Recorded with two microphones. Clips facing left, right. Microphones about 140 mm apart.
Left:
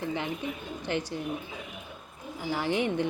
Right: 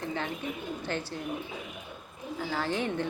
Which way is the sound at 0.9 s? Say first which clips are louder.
Left 5 dB; 15° left (ahead or behind).